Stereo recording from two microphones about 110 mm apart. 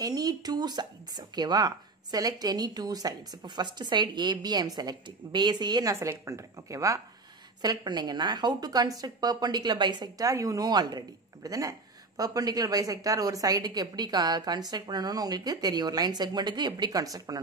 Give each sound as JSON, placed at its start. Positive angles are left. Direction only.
{"t": 0.0, "sound": "speech", "side_deg": -35}
{"t": 5.9, "sound": "speech", "side_deg": -25}